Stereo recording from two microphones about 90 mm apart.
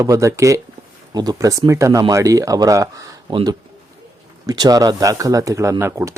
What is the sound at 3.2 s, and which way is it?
Speech, 60° right (ahead or behind).